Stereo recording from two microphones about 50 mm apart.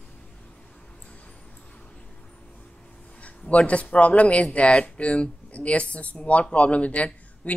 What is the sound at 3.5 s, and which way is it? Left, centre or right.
Speech, left.